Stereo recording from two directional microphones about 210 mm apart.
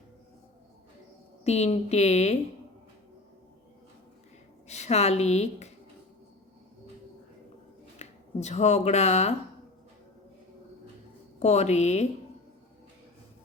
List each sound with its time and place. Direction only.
1.5 s a woman's voice: 30° left (ahead or behind)
4.7 s a woman's voice: 30° left (ahead or behind)
7.9 s speech: 30° left (ahead or behind)
11.3 s a woman's voice: 30° left (ahead or behind)